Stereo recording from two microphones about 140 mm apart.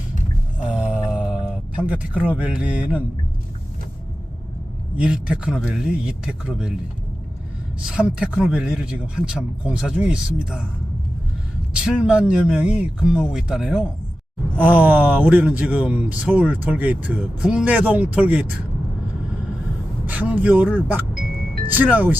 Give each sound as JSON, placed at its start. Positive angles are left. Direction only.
{"t": 0.7, "sound": "a sound", "side_deg": -10}
{"t": 1.8, "sound": "speech", "side_deg": -10}
{"t": 4.9, "sound": "speech", "side_deg": -10}
{"t": 7.9, "sound": "a woman's voice", "side_deg": -5}
{"t": 11.7, "sound": "speech", "side_deg": -10}
{"t": 20.1, "sound": "speech", "side_deg": -10}
{"t": 21.2, "sound": "music", "side_deg": -90}
{"t": 21.7, "sound": "speech", "side_deg": -10}